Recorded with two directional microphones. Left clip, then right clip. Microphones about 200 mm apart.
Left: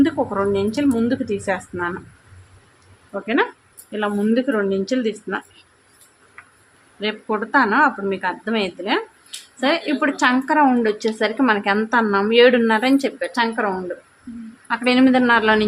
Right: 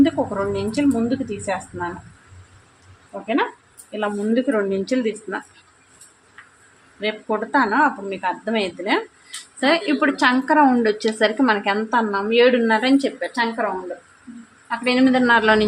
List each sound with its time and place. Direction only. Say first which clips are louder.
0.0 s a woman's voice: even; 15° left (ahead or behind)
3.1 s a woman's voice: left 2 dB; 15° left (ahead or behind)
7.0 s a woman's voice: even; 5° left (ahead or behind)
14.7 s speech: left 2 dB; 15° left (ahead or behind)